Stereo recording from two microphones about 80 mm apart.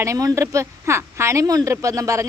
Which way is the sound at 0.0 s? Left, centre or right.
Right.